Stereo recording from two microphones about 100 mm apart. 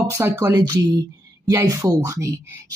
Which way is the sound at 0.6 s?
40° right (ahead or behind).